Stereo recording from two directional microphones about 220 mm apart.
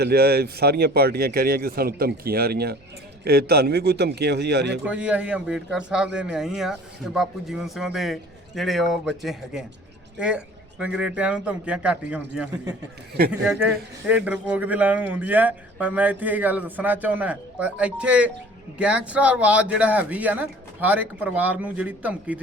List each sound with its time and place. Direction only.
0.0 s speech: 45° right (ahead or behind)
4.9 s speech: 5° right (ahead or behind)